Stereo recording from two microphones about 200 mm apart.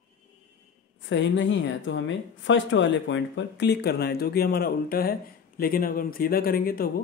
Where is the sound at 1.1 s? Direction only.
65° left (ahead or behind).